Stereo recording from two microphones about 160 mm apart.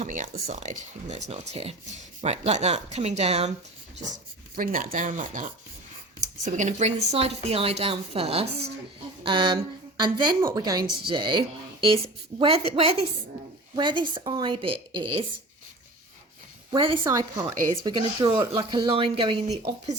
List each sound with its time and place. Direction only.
0.0 s speech: 50° right (ahead or behind)
4.5 s a woman's voice: 60° right (ahead or behind); by 15.3 s 30° right (ahead or behind)
16.7 s speech: 30° right (ahead or behind)
17.0 s a woman's voice: 20° right (ahead or behind)